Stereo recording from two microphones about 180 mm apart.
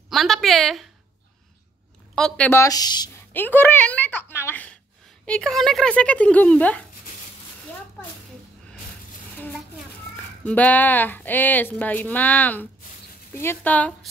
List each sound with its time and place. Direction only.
0.1 s a woman's voice: centre (ahead or behind)
2.1 s speech: 5° left (ahead or behind); by 3.1 s 20° left (ahead or behind)
3.3 s speech: 10° left (ahead or behind)
10.4 s speech: 10° left (ahead or behind)